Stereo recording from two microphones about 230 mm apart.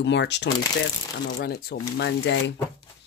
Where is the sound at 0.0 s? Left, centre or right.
Left.